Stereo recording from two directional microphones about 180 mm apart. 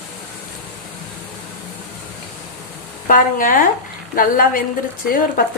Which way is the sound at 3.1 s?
50° left (ahead or behind).